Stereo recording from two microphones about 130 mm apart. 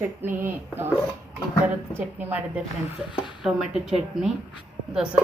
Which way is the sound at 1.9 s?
15° right (ahead or behind).